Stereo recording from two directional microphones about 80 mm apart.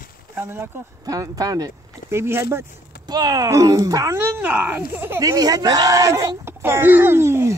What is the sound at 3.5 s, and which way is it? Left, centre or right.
Speech, right.